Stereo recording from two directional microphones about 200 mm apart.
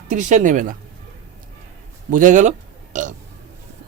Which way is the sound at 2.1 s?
40° right (ahead or behind).